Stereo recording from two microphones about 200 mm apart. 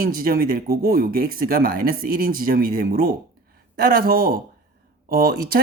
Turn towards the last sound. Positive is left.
turn(degrees=-50)  # may be behind; listen again after turning